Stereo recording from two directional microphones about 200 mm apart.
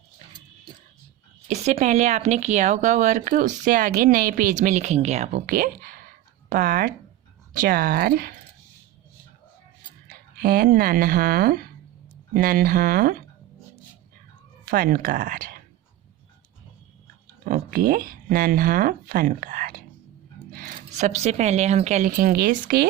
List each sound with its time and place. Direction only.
1.5 s speech: 35° right (ahead or behind)
10.3 s speech: 50° right (ahead or behind)
14.7 s speech: 45° right (ahead or behind)
17.5 s speech: 45° right (ahead or behind)